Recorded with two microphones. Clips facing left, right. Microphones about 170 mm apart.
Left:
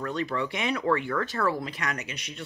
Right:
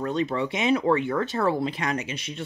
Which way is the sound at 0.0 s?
25° right (ahead or behind).